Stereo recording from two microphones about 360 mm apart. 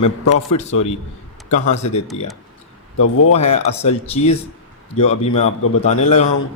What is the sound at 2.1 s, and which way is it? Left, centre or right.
Speech, centre.